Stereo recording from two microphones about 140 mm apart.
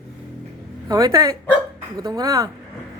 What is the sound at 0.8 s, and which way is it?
Speech, 25° right (ahead or behind).